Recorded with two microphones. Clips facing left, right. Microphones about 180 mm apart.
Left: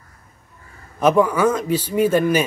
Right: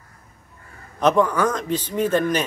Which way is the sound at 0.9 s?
10° left (ahead or behind).